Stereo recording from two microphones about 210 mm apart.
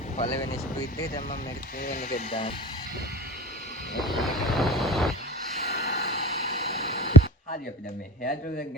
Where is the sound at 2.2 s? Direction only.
25° left (ahead or behind).